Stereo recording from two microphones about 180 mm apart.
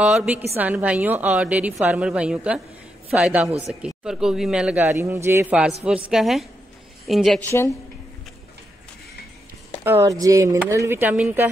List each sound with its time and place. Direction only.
0.0 s a man's voice: 5° right (ahead or behind)
9.8 s a woman's voice: 15° right (ahead or behind)